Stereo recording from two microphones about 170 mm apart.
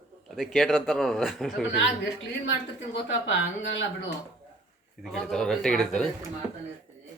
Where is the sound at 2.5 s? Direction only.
90° left.